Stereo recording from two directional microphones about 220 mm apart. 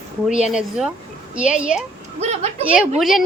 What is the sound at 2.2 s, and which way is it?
Speech, 30° right (ahead or behind).